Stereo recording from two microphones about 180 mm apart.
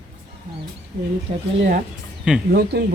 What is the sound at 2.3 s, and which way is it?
Speech, 5° right (ahead or behind).